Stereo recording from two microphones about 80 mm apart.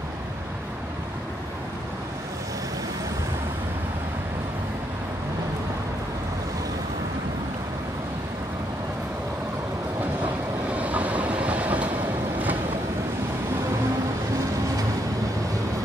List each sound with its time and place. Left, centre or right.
10.7 s train: centre